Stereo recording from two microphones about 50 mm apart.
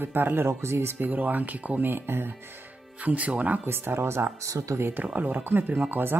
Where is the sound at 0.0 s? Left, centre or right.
Right.